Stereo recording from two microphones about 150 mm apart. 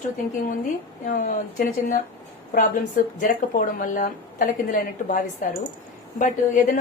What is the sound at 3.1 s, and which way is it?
A woman's voice, 70° left (ahead or behind).